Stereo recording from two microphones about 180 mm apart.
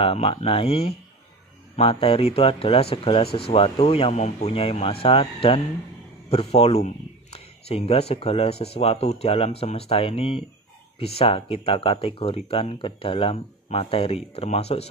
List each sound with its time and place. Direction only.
0.0 s speech: 30° left (ahead or behind)